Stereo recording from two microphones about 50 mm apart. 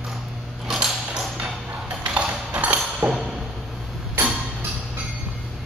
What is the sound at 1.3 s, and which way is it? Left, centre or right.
Ping, right.